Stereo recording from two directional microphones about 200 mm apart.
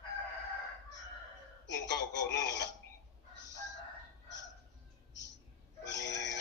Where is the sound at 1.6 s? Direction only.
60° left (ahead or behind).